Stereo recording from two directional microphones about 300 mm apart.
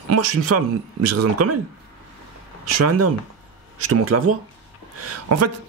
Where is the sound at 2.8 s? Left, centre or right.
Right.